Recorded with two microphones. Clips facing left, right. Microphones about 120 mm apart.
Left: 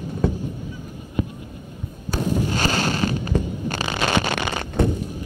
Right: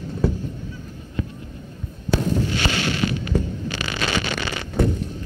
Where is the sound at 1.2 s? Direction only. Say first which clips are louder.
Left 4 dB; 15° left (ahead or behind).